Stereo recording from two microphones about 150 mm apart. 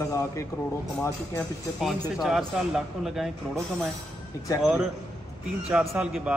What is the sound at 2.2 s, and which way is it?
A man's voice, 5° right (ahead or behind).